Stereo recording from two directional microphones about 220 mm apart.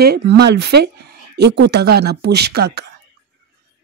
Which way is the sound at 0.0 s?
50° right (ahead or behind).